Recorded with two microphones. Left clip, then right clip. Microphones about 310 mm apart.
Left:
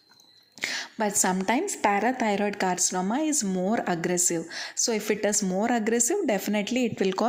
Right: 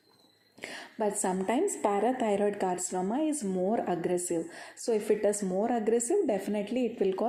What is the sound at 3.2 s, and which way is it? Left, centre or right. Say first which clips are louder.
Speech: left 3 dB; left.